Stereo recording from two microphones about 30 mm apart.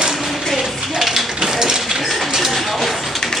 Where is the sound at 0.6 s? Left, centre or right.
Centre.